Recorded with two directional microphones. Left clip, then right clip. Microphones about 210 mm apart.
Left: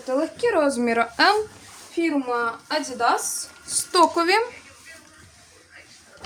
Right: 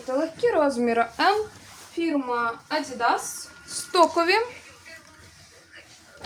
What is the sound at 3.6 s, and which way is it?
Speech, 20° left (ahead or behind).